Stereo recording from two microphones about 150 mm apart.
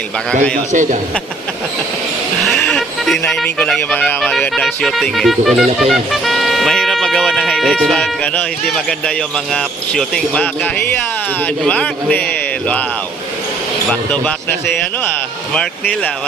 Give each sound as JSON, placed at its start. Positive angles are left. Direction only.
{"t": 0.7, "sound": "a man's voice", "side_deg": -60}
{"t": 2.5, "sound": "a man's voice", "side_deg": 0}
{"t": 13.9, "sound": "a man's voice", "side_deg": 10}
{"t": 15.5, "sound": "speech", "side_deg": 5}